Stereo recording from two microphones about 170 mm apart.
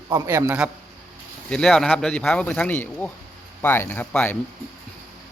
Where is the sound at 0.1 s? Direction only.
15° right (ahead or behind).